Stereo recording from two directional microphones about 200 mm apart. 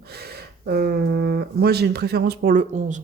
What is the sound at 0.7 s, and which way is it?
Speech, 50° right (ahead or behind).